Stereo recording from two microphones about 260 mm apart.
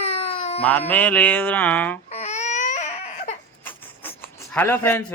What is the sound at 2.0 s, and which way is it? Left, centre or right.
Baby cry, left.